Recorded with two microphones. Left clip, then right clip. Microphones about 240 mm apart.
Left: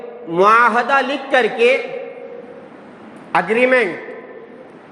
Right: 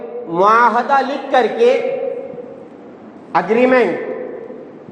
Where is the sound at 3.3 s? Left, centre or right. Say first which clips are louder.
Right 1 dB; left.